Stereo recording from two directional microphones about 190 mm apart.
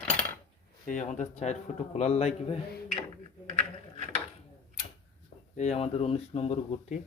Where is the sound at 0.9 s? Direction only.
40° left (ahead or behind).